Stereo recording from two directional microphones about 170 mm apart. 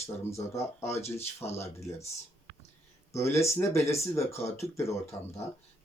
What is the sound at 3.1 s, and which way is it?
Speech, 15° left (ahead or behind).